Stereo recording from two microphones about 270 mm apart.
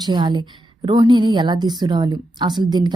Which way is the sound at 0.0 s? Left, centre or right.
Centre.